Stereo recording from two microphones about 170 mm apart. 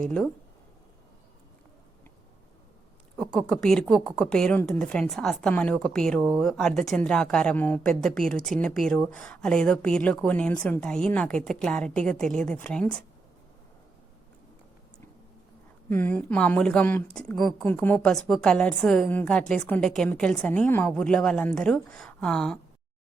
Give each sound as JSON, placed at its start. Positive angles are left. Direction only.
{"t": 0.0, "sound": "speech", "side_deg": 5}
{"t": 3.2, "sound": "speech", "side_deg": 5}
{"t": 15.9, "sound": "speech", "side_deg": 10}